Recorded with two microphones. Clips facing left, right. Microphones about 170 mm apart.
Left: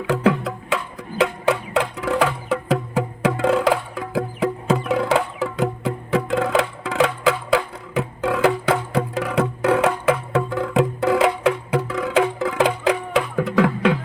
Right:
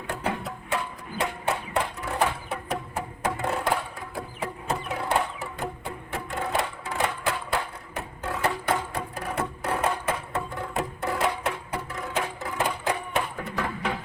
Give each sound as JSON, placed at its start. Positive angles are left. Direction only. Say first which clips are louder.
{"t": 0.1, "sound": "music", "louder": "left 11 dB", "side_deg": 90}